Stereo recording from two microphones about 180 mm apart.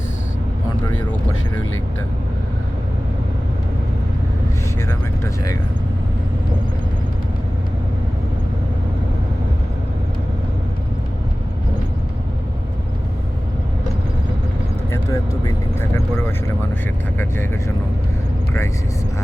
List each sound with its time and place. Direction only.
4.9 s vehicle: 15° left (ahead or behind)
14.9 s vehicle: 20° left (ahead or behind)